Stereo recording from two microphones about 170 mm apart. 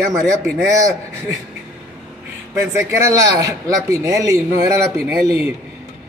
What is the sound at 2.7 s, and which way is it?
Speech, 15° right (ahead or behind).